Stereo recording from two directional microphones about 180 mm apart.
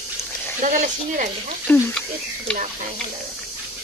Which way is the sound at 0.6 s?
45° right (ahead or behind).